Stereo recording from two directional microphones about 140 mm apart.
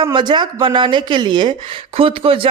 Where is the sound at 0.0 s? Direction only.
35° right (ahead or behind).